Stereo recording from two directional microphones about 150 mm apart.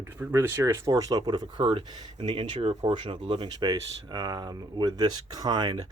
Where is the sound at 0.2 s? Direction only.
15° right (ahead or behind).